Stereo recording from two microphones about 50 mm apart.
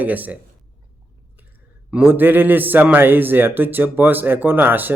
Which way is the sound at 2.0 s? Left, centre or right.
Right.